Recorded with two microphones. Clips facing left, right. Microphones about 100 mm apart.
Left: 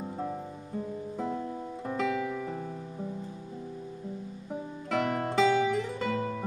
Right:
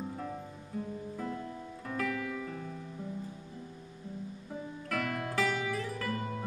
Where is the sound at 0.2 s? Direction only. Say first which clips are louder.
Left 5 dB; 20° left (ahead or behind).